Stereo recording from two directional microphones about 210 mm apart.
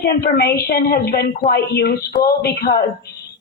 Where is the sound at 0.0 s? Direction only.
50° left (ahead or behind).